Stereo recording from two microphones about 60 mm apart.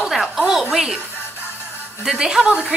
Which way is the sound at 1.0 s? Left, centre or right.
Left.